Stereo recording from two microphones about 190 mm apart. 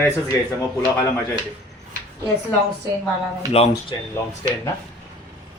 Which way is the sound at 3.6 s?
35° left (ahead or behind).